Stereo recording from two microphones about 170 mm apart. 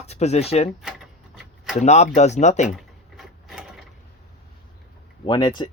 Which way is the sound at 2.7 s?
Centre (ahead or behind).